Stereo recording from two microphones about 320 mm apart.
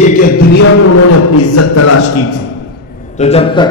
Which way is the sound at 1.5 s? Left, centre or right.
Left.